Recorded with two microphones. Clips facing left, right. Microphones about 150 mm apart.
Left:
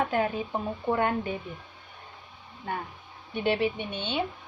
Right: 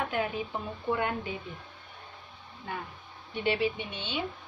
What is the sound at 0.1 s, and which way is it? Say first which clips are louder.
Speech: left 4 dB; 40° left (ahead or behind).